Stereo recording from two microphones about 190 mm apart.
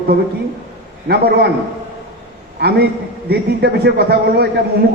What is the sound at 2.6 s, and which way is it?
A man's voice, 60° right (ahead or behind).